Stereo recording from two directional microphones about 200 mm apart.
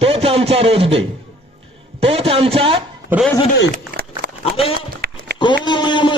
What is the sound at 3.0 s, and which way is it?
Speech, 5° right (ahead or behind).